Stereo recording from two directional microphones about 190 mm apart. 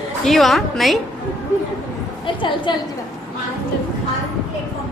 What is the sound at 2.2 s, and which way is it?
Speech, 25° left (ahead or behind).